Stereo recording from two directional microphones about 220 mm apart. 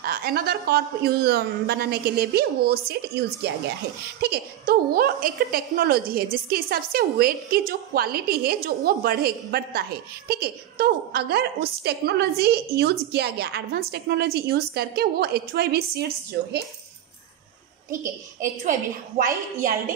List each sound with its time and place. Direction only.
0.0 s a woman's voice: 45° right (ahead or behind)
18.4 s a woman's voice: 35° right (ahead or behind)